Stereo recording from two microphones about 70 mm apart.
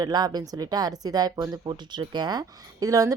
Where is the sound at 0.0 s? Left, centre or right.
Right.